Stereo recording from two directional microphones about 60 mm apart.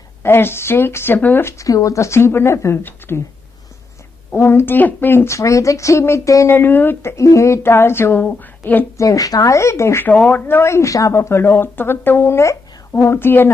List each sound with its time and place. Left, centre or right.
0.2 s speech: left
1.6 s a woman's voice: left
4.4 s speech: left
5.3 s speech: left
6.2 s speech: left
6.5 s speech: left
7.0 s a woman's voice: left
8.2 s a woman's voice: left
8.9 s speech: left
10.2 s speech: left